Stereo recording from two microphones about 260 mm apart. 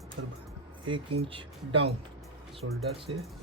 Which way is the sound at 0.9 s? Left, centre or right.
Right.